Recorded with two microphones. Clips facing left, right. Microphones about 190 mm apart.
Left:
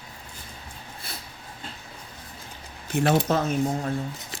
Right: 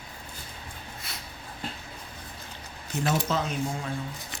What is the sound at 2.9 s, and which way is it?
Speech, 60° left (ahead or behind).